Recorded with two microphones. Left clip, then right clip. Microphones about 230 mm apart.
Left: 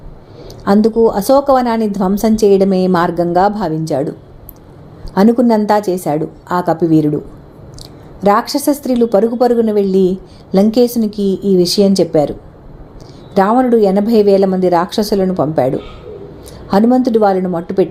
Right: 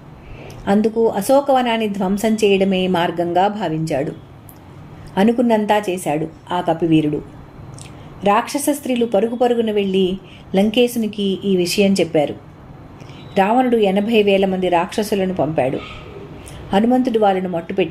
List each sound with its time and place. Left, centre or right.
0.7 s a woman's voice: left
5.1 s a woman's voice: left
8.4 s a woman's voice: left
13.3 s a woman's voice: left
16.7 s a woman's voice: left